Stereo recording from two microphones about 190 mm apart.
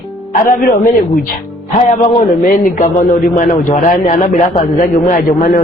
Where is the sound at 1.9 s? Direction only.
40° left (ahead or behind).